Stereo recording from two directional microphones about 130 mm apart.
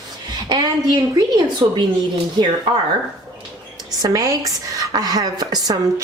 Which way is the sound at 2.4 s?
30° right (ahead or behind).